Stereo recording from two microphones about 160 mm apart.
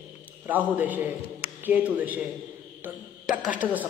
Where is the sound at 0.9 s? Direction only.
10° right (ahead or behind).